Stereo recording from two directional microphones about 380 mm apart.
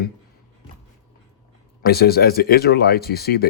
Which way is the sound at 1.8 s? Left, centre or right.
Left.